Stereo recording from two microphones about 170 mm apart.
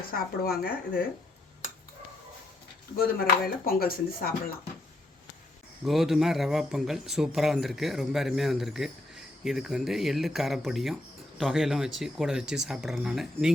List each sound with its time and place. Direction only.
0.0 s a woman's voice: 60° left (ahead or behind)
3.2 s a woman's voice: 60° left (ahead or behind)
5.8 s speech: centre (ahead or behind)